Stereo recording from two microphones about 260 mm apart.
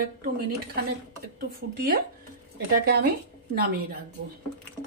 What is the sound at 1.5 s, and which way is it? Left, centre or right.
Speech, right.